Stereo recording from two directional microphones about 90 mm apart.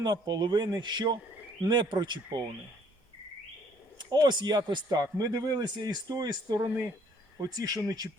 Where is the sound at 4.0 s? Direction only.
55° right (ahead or behind).